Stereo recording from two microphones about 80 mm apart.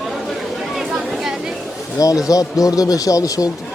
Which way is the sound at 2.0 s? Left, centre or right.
Left.